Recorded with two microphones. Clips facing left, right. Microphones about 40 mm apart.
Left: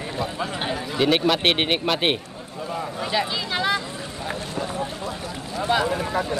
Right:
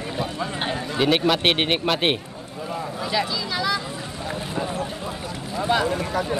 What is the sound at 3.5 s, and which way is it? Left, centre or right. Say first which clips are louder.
Vehicle: left 1 dB; left.